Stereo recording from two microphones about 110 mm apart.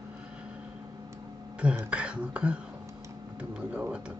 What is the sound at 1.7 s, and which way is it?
Speech, 10° right (ahead or behind).